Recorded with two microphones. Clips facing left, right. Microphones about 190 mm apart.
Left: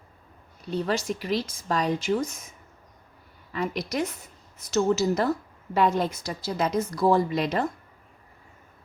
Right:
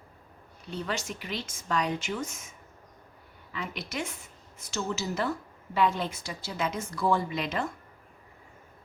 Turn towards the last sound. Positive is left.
turn(degrees=35)  # may be behind; listen again after turning